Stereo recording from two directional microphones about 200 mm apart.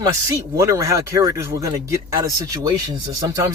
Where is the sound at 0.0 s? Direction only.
15° right (ahead or behind).